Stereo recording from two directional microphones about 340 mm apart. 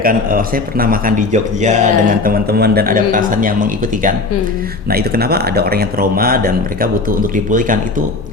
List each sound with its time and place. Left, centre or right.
0.0 s a man's voice: right